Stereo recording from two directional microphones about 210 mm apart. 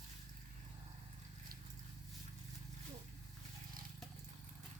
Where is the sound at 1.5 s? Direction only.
45° right (ahead or behind).